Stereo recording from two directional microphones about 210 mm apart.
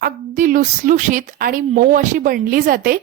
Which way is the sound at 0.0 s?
40° right (ahead or behind).